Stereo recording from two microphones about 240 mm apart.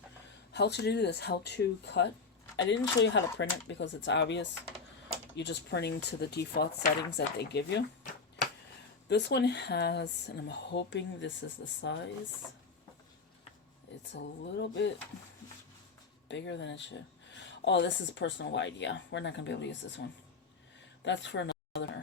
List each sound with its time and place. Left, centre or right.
0.5 s speech: left
9.0 s speech: left
14.1 s speech: left
16.3 s speech: left
21.0 s a woman's voice: left